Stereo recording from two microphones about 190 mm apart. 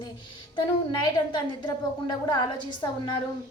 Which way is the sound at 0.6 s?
25° left (ahead or behind).